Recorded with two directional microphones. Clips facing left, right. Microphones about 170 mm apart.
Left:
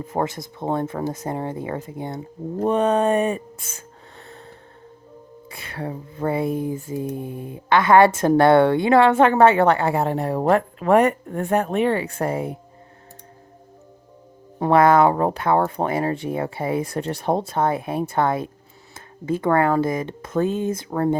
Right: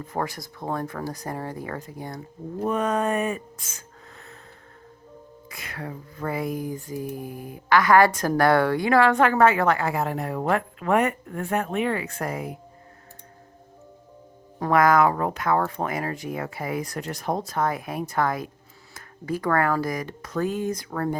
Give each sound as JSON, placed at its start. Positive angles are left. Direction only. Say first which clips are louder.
{"t": 0.0, "sound": "speech", "louder": "left 5 dB", "side_deg": 25}
{"t": 5.5, "sound": "speech", "louder": "left 5 dB", "side_deg": 30}
{"t": 14.6, "sound": "speech", "louder": "left 4 dB", "side_deg": 30}